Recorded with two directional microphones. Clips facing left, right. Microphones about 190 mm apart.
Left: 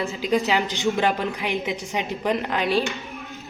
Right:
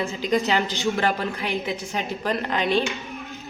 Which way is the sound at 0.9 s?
15° left (ahead or behind).